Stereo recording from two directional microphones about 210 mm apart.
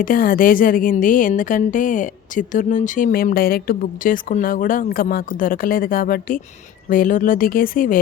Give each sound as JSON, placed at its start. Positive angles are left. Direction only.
{"t": 0.0, "sound": "speech", "side_deg": 40}